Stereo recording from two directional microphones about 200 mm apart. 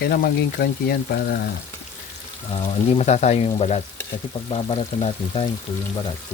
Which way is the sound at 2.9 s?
35° left (ahead or behind).